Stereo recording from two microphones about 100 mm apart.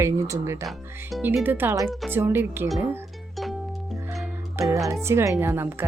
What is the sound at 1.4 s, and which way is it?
A woman's voice, 20° right (ahead or behind).